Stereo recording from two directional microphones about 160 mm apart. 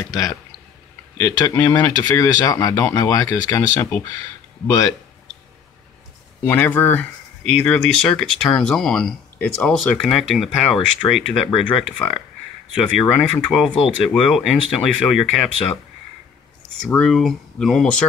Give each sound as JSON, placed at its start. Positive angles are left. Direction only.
{"t": 0.0, "sound": "speech", "side_deg": 20}
{"t": 6.4, "sound": "speech", "side_deg": 10}
{"t": 13.7, "sound": "speech", "side_deg": 35}
{"t": 14.0, "sound": "speech", "side_deg": 0}
{"t": 16.8, "sound": "speech", "side_deg": 5}